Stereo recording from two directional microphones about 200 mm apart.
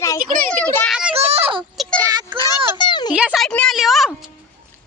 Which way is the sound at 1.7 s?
Centre (ahead or behind).